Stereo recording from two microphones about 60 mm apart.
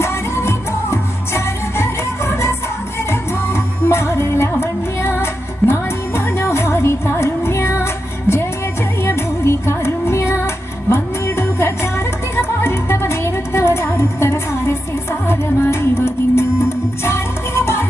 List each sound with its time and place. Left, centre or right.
0.0 s music: left